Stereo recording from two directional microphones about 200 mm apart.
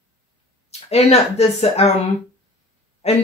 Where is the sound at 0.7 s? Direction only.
30° left (ahead or behind).